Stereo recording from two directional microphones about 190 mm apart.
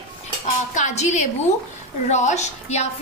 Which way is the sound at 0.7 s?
40° left (ahead or behind).